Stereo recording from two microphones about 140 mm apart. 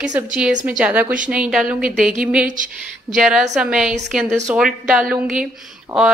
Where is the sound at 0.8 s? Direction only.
10° right (ahead or behind).